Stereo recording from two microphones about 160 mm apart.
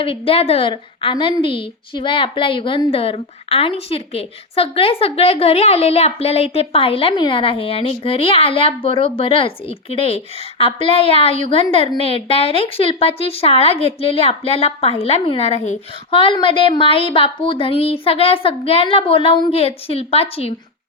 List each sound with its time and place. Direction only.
0.0 s a woman's voice: 35° left (ahead or behind)